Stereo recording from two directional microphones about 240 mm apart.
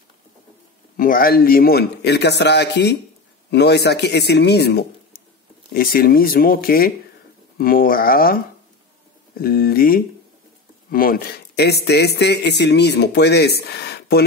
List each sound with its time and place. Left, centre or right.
0.9 s a man's voice: left
9.4 s a man's voice: left